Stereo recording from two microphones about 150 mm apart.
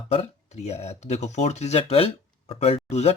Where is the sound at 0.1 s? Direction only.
45° left (ahead or behind).